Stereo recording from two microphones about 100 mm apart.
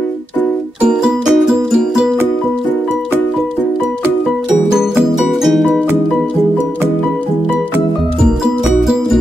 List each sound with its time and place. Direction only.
0.8 s music: 5° right (ahead or behind)
4.7 s music: 5° right (ahead or behind)